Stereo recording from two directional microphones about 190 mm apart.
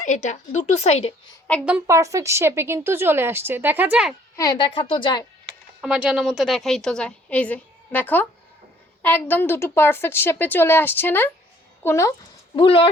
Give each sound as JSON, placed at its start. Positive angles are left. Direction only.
{"t": 0.0, "sound": "speech", "side_deg": 40}
{"t": 1.6, "sound": "a woman's voice", "side_deg": -5}
{"t": 2.0, "sound": "a woman's voice", "side_deg": -15}
{"t": 4.4, "sound": "a woman's voice", "side_deg": 25}
{"t": 5.8, "sound": "a woman's voice", "side_deg": -5}
{"t": 12.5, "sound": "a woman's voice", "side_deg": 30}